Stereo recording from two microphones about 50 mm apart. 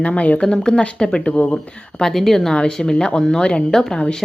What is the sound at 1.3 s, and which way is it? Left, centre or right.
Speech, left.